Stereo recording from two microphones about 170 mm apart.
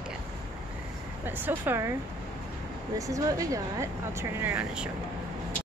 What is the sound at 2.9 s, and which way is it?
Speech, 20° right (ahead or behind).